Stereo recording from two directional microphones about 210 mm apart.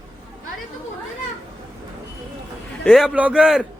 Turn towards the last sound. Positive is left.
turn(degrees=-5)  # may be behind; listen again after turning